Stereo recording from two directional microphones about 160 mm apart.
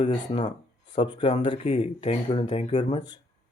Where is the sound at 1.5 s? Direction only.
50° left (ahead or behind).